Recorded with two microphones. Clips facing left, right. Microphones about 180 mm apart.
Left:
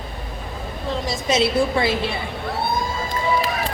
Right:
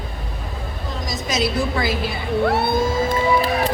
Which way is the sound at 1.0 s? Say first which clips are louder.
Left 2 dB; 25° left (ahead or behind).